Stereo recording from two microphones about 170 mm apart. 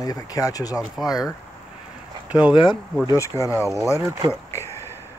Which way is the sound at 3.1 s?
20° left (ahead or behind).